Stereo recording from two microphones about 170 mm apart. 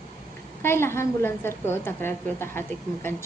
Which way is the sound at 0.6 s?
15° left (ahead or behind).